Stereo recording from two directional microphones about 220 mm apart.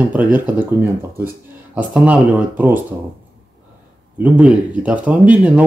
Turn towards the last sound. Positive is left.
turn(degrees=-5)  # may be behind; listen again after turning